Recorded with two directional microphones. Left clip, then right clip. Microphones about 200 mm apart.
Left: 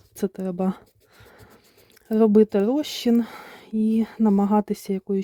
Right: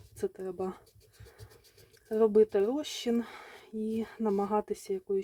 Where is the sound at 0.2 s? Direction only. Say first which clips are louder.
Left 7 dB; 45° left (ahead or behind).